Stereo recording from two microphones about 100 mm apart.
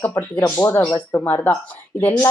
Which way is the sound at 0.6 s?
30° left (ahead or behind).